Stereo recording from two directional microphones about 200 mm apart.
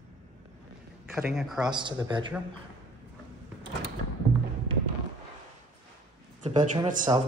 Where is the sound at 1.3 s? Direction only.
Centre (ahead or behind).